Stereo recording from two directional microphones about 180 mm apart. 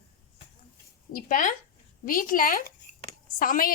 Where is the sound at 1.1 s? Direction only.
50° left (ahead or behind).